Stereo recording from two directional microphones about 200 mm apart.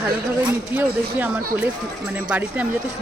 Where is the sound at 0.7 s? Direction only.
10° right (ahead or behind).